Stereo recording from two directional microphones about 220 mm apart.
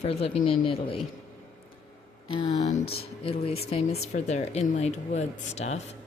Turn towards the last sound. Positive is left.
turn(degrees=30)  # may be behind; listen again after turning